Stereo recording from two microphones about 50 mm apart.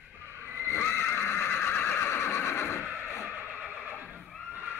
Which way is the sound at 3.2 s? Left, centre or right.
Right.